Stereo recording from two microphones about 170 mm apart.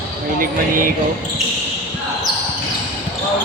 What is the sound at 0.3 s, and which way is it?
Speech, 55° right (ahead or behind).